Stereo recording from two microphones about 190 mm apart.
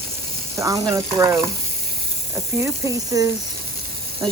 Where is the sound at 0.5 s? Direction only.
15° right (ahead or behind).